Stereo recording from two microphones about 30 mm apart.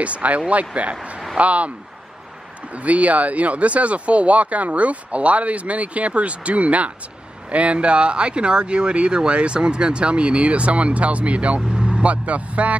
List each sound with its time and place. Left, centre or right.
0.0 s speech: right
2.7 s speech: right